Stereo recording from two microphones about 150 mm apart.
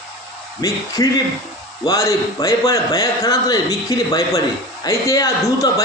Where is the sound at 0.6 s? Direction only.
25° left (ahead or behind).